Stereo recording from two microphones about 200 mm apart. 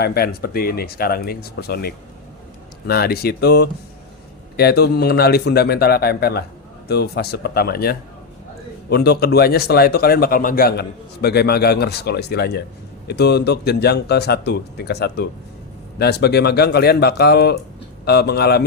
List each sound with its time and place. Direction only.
0.0 s a man's voice: 50° left (ahead or behind)